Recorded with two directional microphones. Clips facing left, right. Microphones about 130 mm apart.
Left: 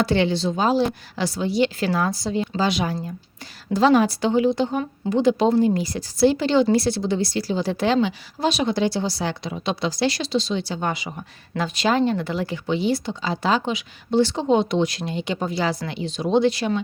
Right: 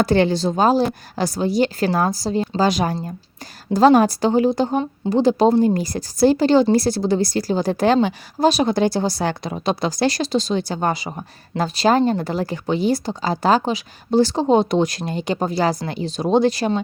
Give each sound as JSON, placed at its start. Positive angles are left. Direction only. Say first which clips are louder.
{"t": 0.0, "sound": "a woman's voice", "louder": "right 3 dB", "side_deg": -45}